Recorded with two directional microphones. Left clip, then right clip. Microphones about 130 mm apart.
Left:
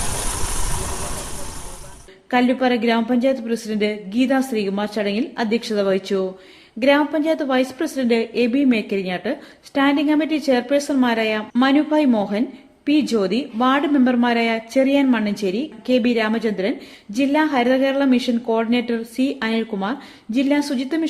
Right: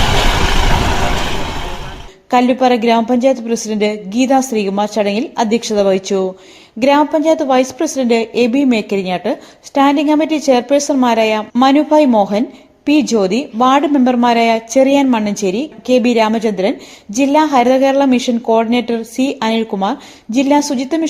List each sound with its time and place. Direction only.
0.1 s vehicle: 35° right (ahead or behind)
2.3 s a woman's voice: 30° right (ahead or behind)